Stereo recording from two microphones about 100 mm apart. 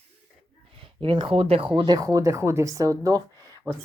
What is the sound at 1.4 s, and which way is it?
Speech, 85° right.